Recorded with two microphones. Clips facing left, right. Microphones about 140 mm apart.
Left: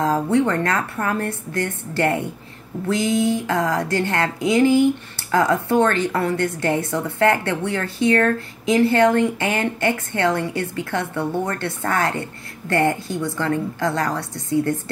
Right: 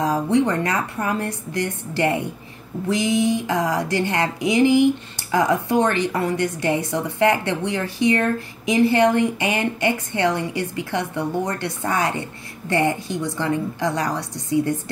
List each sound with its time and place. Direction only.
0.0 s a woman's voice: 15° right (ahead or behind)